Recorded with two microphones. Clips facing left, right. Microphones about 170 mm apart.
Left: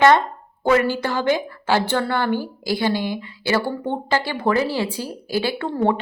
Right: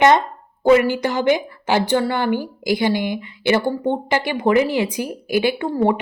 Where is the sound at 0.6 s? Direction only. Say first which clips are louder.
Right 4 dB; 15° right (ahead or behind).